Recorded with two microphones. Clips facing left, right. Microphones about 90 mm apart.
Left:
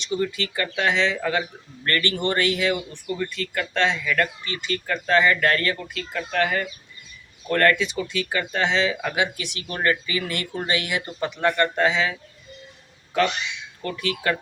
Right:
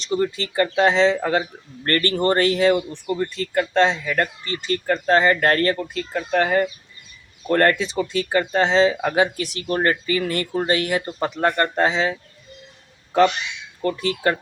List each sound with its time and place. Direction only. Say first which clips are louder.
0.0 s speech: right 3 dB; 35° right (ahead or behind)
13.8 s speech: right 4 dB; 35° right (ahead or behind)